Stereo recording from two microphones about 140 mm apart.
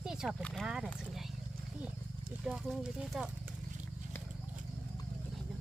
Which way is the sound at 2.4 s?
Centre (ahead or behind).